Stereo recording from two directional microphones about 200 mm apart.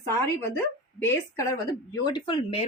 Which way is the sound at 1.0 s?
15° left (ahead or behind).